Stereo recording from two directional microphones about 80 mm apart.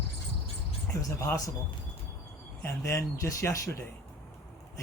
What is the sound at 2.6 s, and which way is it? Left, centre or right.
Speech, left.